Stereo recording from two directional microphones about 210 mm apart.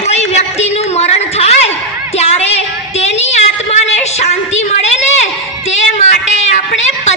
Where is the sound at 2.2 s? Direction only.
30° left (ahead or behind).